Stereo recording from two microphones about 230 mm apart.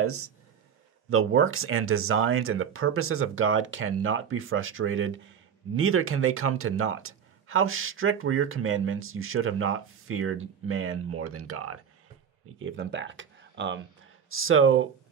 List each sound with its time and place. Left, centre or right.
0.0 s speech: right
1.1 s speech: right
12.5 s speech: right
14.3 s speech: right